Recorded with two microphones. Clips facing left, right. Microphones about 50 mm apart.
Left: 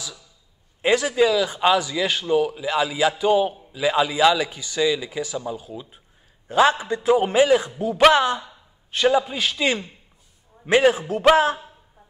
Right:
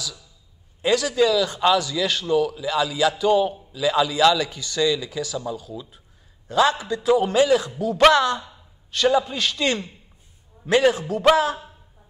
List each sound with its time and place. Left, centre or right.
0.8 s a man's voice: left
3.7 s a man's voice: left
10.6 s a man's voice: left